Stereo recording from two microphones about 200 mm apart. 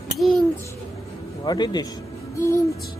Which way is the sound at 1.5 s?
20° left (ahead or behind).